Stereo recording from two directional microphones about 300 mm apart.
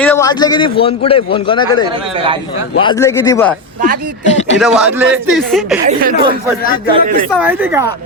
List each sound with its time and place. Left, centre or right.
0.0 s a man's voice: centre
4.3 s speech: left
4.6 s speech: centre
6.1 s speech: centre
7.3 s speech: centre